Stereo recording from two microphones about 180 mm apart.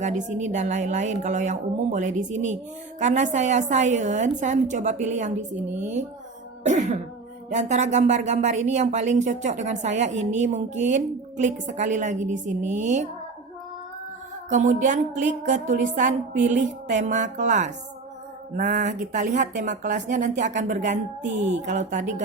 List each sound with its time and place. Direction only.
0.0 s a woman's voice: 45° right (ahead or behind)
6.7 s a woman's voice: 40° right (ahead or behind)
14.5 s a woman's voice: 45° right (ahead or behind)